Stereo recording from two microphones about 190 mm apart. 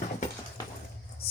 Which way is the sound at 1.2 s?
55° left (ahead or behind).